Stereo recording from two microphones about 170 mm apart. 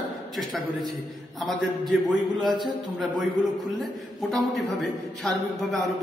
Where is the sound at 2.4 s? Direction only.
25° right (ahead or behind).